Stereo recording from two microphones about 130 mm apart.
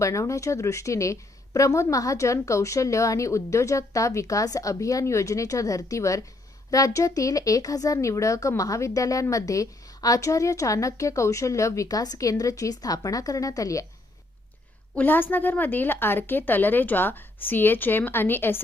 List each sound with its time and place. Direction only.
0.0 s a woman's voice: 25° left (ahead or behind)
14.9 s a woman's voice: 15° left (ahead or behind)